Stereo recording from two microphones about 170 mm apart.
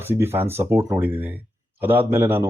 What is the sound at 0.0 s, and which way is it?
Speech, 15° right (ahead or behind).